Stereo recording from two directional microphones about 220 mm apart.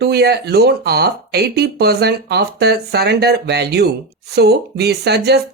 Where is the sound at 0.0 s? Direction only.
45° right (ahead or behind).